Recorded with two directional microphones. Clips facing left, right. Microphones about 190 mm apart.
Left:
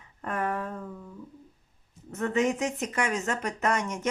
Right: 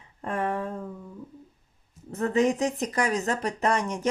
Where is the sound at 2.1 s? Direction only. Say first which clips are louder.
Right 3 dB; 35° right (ahead or behind).